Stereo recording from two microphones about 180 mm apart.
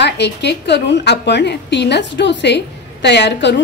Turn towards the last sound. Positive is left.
turn(degrees=75)  # may be behind; listen again after turning